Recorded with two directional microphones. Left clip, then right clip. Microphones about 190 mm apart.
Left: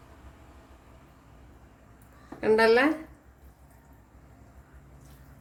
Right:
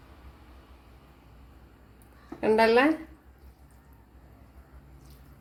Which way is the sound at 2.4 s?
25° right (ahead or behind).